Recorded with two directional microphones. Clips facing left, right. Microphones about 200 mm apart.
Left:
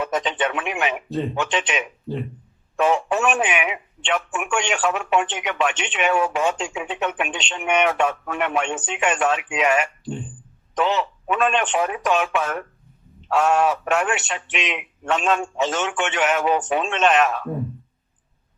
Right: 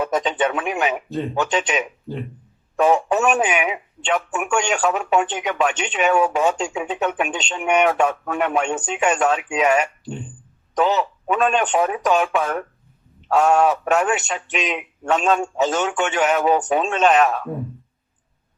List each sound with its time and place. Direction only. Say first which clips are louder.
0.0 s speech: right 3 dB; 40° right (ahead or behind)
13.2 s a sound: right 3 dB; 40° right (ahead or behind)
13.8 s speech: right 3 dB; 40° right (ahead or behind)